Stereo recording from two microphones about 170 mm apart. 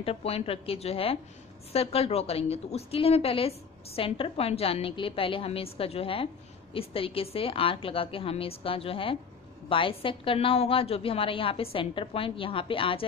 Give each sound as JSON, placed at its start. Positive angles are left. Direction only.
{"t": 0.0, "sound": "a woman's voice", "side_deg": 35}